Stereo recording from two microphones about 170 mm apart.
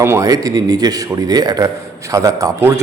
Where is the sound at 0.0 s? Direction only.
15° right (ahead or behind).